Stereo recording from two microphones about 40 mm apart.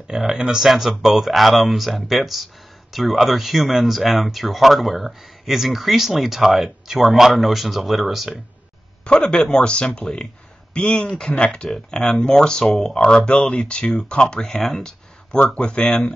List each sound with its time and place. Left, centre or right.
0.1 s speech: centre
0.7 s speech: centre
9.0 s speech: left
11.7 s speech: centre
14.4 s speech: centre; by 16.0 s left